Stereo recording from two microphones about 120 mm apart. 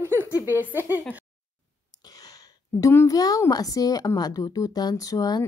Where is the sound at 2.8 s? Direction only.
25° left (ahead or behind).